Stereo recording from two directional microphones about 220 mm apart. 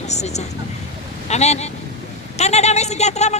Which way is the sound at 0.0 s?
30° left (ahead or behind).